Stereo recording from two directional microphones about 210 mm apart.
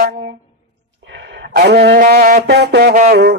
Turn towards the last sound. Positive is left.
turn(degrees=-50)  # may be behind; listen again after turning